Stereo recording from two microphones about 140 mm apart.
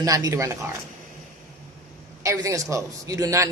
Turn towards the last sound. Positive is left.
turn(degrees=-25)  # may be behind; listen again after turning